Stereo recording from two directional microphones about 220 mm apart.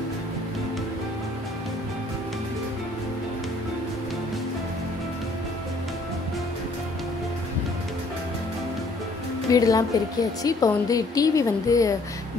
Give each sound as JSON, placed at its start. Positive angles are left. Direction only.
{"t": 9.5, "sound": "a woman's voice", "side_deg": 15}